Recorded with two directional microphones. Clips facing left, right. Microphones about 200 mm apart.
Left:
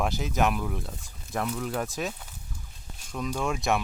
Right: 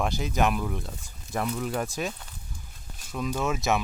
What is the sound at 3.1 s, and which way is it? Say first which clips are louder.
Speech: right 1 dB; 5° right (ahead or behind).